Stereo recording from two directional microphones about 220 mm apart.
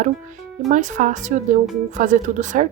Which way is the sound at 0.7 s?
35° right (ahead or behind).